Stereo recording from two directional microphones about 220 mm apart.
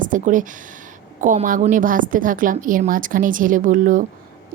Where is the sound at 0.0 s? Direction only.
35° right (ahead or behind).